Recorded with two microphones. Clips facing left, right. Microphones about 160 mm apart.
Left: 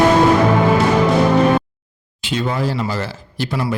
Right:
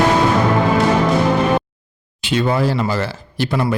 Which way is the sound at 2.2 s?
70° right (ahead or behind).